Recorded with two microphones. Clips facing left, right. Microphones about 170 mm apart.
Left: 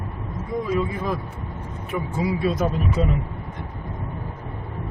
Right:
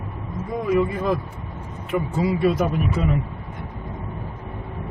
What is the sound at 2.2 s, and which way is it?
Speech, 60° right (ahead or behind).